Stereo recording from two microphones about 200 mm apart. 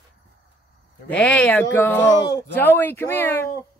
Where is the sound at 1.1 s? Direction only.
5° left (ahead or behind).